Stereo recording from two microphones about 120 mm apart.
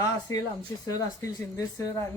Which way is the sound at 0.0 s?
30° left (ahead or behind).